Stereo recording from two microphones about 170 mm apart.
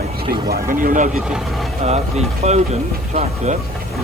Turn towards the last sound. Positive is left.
turn(degrees=-40)  # may be behind; listen again after turning